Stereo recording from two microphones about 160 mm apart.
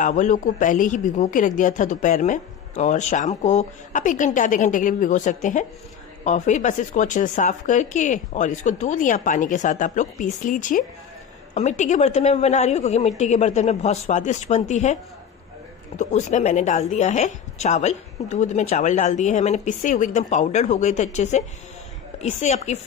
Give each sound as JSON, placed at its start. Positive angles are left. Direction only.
{"t": 0.0, "sound": "a woman's voice", "side_deg": 50}
{"t": 16.0, "sound": "a woman's voice", "side_deg": 50}